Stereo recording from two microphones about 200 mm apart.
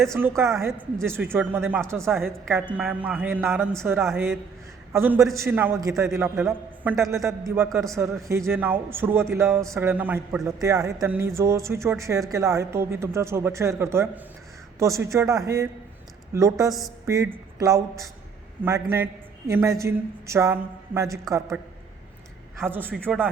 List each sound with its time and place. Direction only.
0.0 s a woman's voice: 15° right (ahead or behind)
0.4 s a woman's voice: centre (ahead or behind)
1.0 s a woman's voice: 10° right (ahead or behind)
22.6 s a woman's voice: 10° right (ahead or behind)
22.9 s a woman's voice: 5° left (ahead or behind)